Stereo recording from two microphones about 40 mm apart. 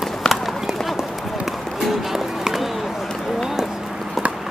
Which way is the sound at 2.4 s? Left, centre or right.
Centre.